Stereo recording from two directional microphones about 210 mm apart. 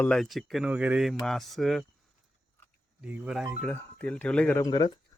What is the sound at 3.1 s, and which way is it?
Speech, 5° right (ahead or behind).